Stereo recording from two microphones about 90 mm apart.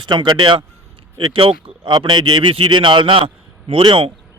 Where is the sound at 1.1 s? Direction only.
75° right (ahead or behind); by 4.0 s 90° right.